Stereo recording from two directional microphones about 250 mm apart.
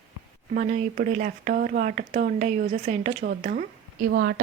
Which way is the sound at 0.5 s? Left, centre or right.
Right.